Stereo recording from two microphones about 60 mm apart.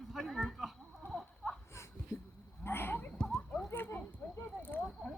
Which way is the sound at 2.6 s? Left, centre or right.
Left.